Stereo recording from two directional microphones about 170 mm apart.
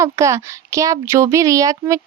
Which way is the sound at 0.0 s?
15° right (ahead or behind).